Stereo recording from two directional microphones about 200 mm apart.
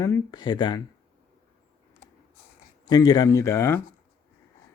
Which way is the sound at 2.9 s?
20° left (ahead or behind).